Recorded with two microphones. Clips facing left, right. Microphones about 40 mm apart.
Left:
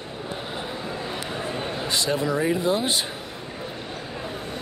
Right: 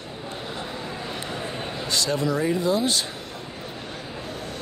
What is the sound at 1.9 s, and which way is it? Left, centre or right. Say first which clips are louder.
Speech: even; left.